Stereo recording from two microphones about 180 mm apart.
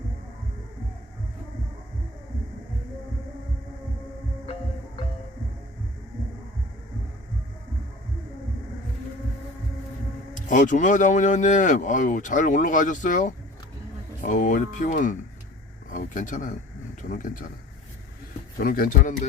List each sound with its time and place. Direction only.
10.3 s speech: 45° left (ahead or behind)
18.6 s speech: 50° left (ahead or behind)